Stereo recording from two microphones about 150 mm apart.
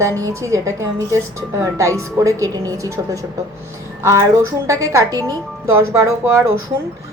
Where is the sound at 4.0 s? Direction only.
20° right (ahead or behind).